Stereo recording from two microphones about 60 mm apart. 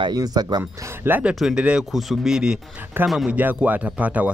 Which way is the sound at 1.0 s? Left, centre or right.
Right.